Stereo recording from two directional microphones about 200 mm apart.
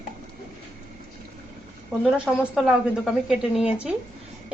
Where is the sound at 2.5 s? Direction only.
Centre (ahead or behind).